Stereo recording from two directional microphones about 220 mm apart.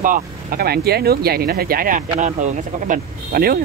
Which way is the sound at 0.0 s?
40° right (ahead or behind).